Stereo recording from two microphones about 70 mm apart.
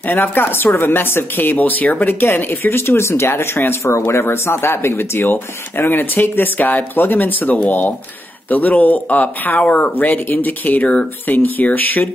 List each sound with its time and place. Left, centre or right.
0.0 s speech: left